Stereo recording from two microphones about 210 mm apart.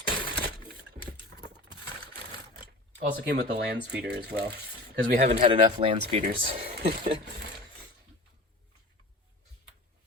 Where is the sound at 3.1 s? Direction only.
50° right (ahead or behind); by 6.6 s 25° right (ahead or behind).